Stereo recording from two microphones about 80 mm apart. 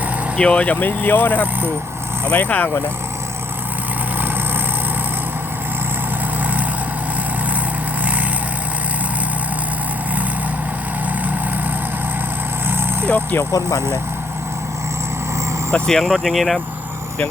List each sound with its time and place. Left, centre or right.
0.3 s speech: centre
6.4 s vehicle: right
12.6 s vehicle: right
13.1 s speech: centre
13.5 s speech: left
15.7 s speech: centre